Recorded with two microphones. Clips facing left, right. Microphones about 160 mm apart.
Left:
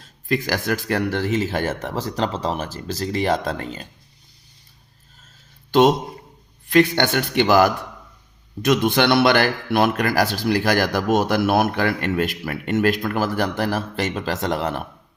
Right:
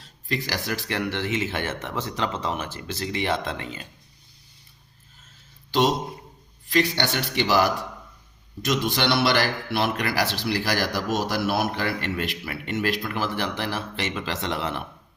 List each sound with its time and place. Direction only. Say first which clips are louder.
0.0 s speech: left 6 dB; 50° left (ahead or behind)
6.7 s a man's voice: left 7 dB; 55° left (ahead or behind)